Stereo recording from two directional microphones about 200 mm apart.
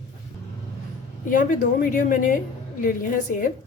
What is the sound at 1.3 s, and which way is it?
A woman's voice, 40° left (ahead or behind).